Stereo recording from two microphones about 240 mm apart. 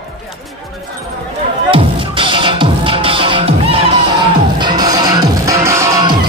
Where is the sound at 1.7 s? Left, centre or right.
Right.